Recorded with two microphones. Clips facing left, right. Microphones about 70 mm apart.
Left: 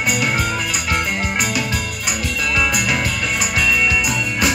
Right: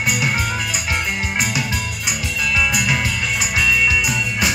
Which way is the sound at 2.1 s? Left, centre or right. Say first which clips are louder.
Left 1 dB; left.